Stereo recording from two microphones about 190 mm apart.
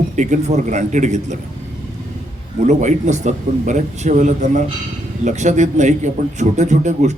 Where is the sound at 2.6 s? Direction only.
40° right (ahead or behind).